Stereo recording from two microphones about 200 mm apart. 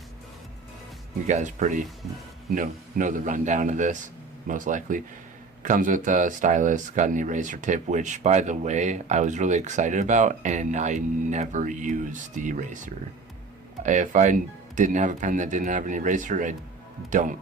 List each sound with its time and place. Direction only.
1.3 s speech: 35° right (ahead or behind)